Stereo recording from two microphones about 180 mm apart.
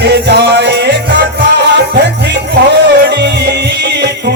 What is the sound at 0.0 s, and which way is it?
Music, 65° right (ahead or behind).